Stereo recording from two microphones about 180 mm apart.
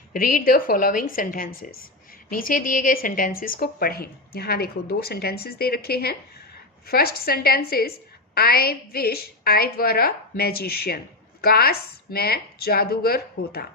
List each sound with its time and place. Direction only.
0.1 s a woman's voice: 55° left (ahead or behind)